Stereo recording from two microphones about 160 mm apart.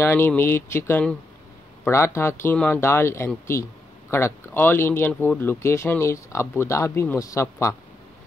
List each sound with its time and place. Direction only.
0.0 s speech: 15° left (ahead or behind)